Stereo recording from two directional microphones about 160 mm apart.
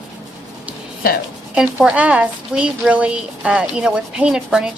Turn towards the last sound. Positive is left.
turn(degrees=-5)  # may be behind; listen again after turning